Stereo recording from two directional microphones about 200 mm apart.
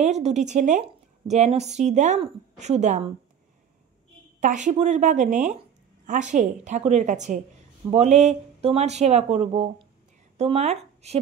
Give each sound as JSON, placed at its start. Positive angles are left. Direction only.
{"t": 0.0, "sound": "a woman's voice", "side_deg": -35}
{"t": 4.4, "sound": "a woman's voice", "side_deg": -40}